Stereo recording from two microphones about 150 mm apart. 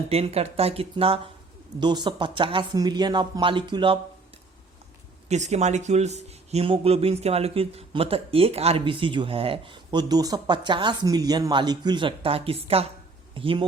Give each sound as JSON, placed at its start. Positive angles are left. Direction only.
{"t": 0.1, "sound": "speech", "side_deg": -45}
{"t": 5.3, "sound": "speech", "side_deg": -50}